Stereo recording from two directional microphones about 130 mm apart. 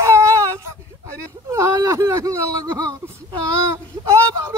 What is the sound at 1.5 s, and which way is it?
Speech, 20° right (ahead or behind).